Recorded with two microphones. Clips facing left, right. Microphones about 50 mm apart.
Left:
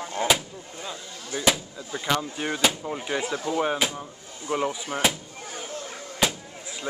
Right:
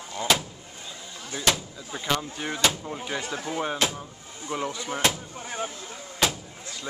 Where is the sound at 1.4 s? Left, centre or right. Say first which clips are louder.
Left 2 dB; centre.